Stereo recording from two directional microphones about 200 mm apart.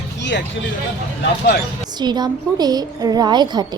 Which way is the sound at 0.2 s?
60° left (ahead or behind).